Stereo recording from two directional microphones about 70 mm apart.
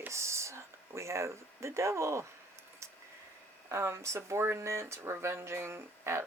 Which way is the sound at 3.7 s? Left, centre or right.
Right.